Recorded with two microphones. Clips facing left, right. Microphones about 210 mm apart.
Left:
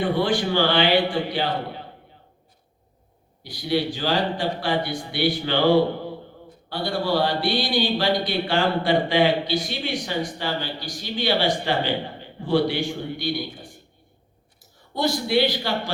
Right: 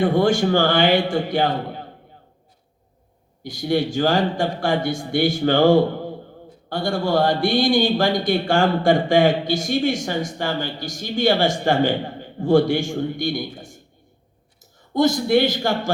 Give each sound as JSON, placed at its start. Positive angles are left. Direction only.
{"t": 0.0, "sound": "speech", "side_deg": -45}
{"t": 3.4, "sound": "speech", "side_deg": -45}
{"t": 14.9, "sound": "speech", "side_deg": -45}